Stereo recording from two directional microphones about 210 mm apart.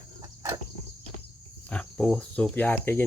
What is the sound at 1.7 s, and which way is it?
Cricket, 5° left (ahead or behind).